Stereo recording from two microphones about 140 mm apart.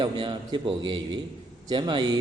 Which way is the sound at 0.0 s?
35° right (ahead or behind).